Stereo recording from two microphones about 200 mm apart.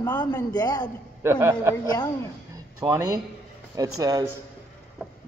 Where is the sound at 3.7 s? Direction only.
20° right (ahead or behind).